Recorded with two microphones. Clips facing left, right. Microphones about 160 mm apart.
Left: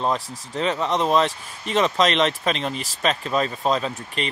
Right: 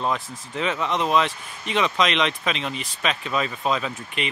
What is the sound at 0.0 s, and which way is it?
Speech, 35° left (ahead or behind).